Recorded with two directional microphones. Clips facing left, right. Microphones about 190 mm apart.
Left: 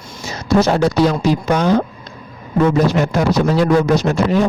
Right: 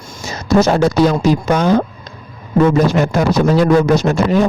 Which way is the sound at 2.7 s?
50° right (ahead or behind).